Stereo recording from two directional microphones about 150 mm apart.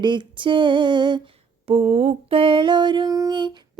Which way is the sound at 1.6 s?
45° right (ahead or behind).